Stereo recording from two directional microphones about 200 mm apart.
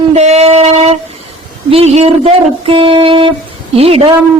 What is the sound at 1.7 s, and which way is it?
Music, 30° right (ahead or behind).